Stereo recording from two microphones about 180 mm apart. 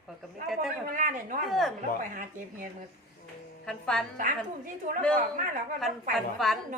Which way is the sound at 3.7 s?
5° left (ahead or behind).